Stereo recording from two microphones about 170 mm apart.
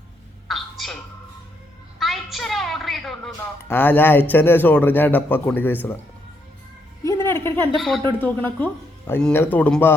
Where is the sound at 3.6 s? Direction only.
10° left (ahead or behind).